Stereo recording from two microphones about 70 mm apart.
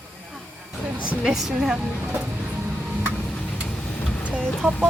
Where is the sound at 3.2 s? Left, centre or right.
Centre.